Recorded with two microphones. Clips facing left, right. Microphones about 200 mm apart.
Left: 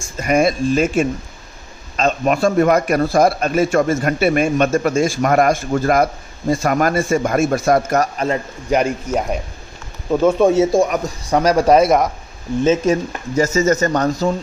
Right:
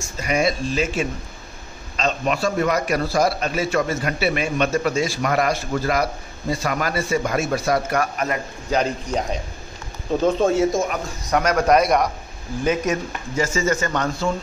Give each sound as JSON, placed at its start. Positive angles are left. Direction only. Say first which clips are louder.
{"t": 0.0, "sound": "a man's voice", "louder": "left 5 dB", "side_deg": 50}
{"t": 8.6, "sound": "speech", "louder": "left 4 dB", "side_deg": 10}
{"t": 10.4, "sound": "speech", "louder": "left 5 dB", "side_deg": 20}
{"t": 10.8, "sound": "a man's voice", "louder": "left 7 dB", "side_deg": 30}
{"t": 13.4, "sound": "a man's voice", "louder": "left 6 dB", "side_deg": 40}